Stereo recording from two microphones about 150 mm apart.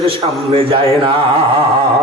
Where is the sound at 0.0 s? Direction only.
35° right (ahead or behind).